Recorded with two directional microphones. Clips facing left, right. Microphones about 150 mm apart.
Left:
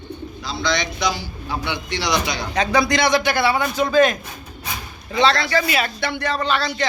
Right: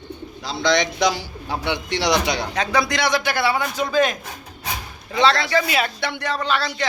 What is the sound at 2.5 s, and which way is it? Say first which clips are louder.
A man's voice: left 6 dB; 5° right (ahead or behind).